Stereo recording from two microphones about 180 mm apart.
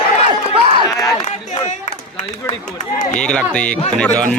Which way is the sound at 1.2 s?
40° left (ahead or behind).